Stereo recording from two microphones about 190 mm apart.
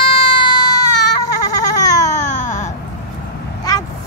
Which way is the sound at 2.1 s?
40° left (ahead or behind).